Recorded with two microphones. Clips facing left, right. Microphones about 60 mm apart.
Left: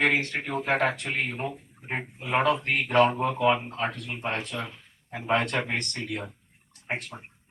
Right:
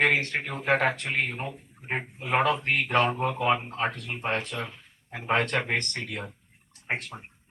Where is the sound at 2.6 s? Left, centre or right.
Right.